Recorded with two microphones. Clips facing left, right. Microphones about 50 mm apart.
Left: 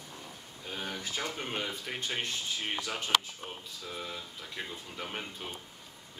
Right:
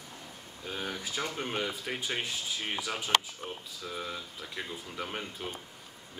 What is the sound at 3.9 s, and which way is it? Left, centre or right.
Speech, centre.